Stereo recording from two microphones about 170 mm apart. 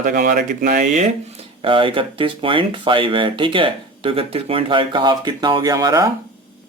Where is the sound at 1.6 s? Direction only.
30° right (ahead or behind).